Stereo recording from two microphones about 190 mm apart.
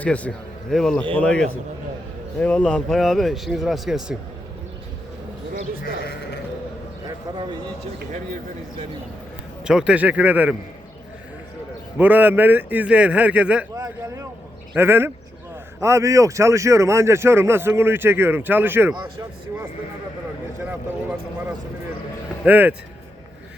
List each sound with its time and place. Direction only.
0.0 s speech: 5° left (ahead or behind)
9.6 s speech: 5° right (ahead or behind)
11.9 s speech: 10° right (ahead or behind)
13.7 s a sound: 20° right (ahead or behind)
14.8 s speech: 10° right (ahead or behind)
20.6 s speech: 10° right (ahead or behind)